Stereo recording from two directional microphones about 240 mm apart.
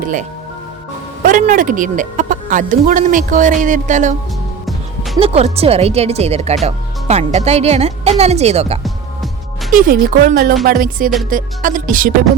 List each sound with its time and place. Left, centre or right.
1.2 s speech: right
5.1 s speech: right
8.8 s music: centre
9.7 s speech: right